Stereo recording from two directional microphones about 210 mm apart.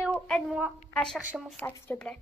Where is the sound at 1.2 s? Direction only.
Centre (ahead or behind).